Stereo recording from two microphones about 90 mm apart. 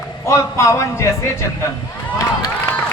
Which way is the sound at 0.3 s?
35° left (ahead or behind).